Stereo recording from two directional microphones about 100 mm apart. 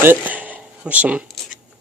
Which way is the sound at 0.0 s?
20° right (ahead or behind).